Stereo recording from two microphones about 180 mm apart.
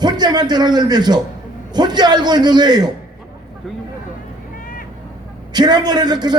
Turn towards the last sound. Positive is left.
turn(degrees=-25)  # may be behind; listen again after turning